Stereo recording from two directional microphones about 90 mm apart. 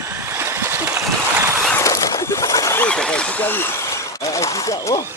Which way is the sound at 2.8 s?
10° left (ahead or behind).